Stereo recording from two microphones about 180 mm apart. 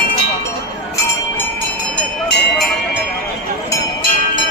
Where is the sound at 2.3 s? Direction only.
70° left (ahead or behind).